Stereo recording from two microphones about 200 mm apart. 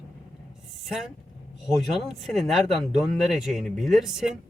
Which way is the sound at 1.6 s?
Centre (ahead or behind).